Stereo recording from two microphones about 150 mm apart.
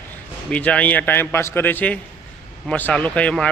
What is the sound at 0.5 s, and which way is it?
Speech, 10° left (ahead or behind).